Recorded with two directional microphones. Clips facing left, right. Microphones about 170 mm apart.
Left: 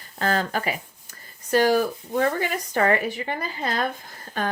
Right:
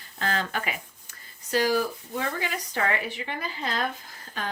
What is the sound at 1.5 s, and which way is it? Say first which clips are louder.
Speech: left 5 dB; 50° left (ahead or behind).